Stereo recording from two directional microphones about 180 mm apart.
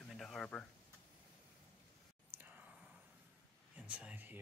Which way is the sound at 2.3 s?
10° right (ahead or behind).